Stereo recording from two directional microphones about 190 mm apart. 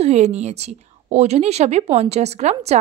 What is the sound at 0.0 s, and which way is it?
A woman's voice, 35° right (ahead or behind).